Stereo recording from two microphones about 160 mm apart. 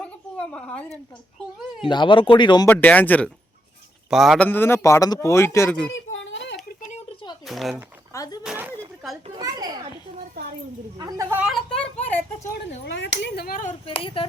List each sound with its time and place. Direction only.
0.0 s a sound: 5° left (ahead or behind)
1.9 s speech: 30° left (ahead or behind)
2.6 s speech: 10° left (ahead or behind)
4.1 s speech: centre (ahead or behind)
4.4 s speech: 15° left (ahead or behind)
6.7 s a sound: 50° left (ahead or behind)
7.4 s speech: centre (ahead or behind)
8.1 s speech: 20° left (ahead or behind)
8.4 s a sound: 10° right (ahead or behind)
9.4 s children playing: 20° right (ahead or behind)
10.9 s speech: 25° right (ahead or behind)
11.3 s speech: 5° right (ahead or behind)
12.8 s speech: 90° left; by 13.7 s 55° left (ahead or behind)
13.8 s speech: 35° left (ahead or behind)